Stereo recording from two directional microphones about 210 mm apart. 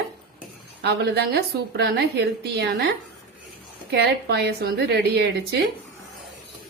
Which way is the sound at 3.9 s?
50° right (ahead or behind).